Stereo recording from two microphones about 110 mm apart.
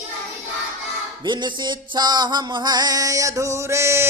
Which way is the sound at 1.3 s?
45° right (ahead or behind).